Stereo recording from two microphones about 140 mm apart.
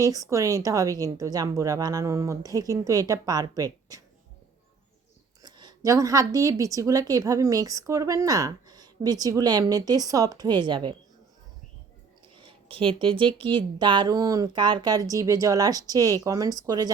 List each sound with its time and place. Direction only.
0.0 s a woman's voice: 25° right (ahead or behind)
5.4 s a woman's voice: 30° right (ahead or behind)
12.4 s a woman's voice: 40° right (ahead or behind)